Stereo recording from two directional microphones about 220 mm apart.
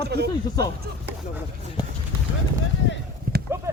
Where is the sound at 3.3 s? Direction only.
40° right (ahead or behind).